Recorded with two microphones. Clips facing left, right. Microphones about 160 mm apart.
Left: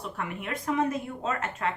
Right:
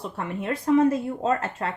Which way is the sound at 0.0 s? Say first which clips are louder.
Right 4 dB; 30° right (ahead or behind).